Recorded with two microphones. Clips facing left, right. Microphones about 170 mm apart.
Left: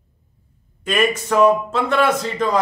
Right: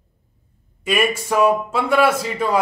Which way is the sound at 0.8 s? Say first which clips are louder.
Left 1 dB; 10° right (ahead or behind).